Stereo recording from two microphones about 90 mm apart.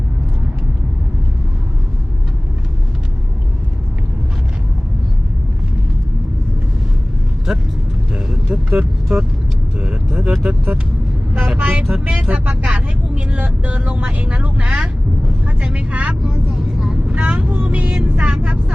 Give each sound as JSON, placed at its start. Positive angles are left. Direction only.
{"t": 8.1, "sound": "vehicle", "side_deg": -10}
{"t": 11.3, "sound": "speech", "side_deg": -15}
{"t": 12.1, "sound": "vehicle", "side_deg": -15}
{"t": 16.2, "sound": "vehicle", "side_deg": -5}
{"t": 17.1, "sound": "vehicle", "side_deg": -15}